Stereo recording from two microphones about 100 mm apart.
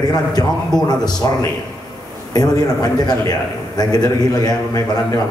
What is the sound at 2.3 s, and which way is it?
A man's voice, 40° left (ahead or behind).